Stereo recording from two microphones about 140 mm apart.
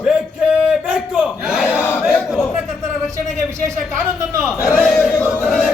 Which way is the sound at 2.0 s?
Centre (ahead or behind).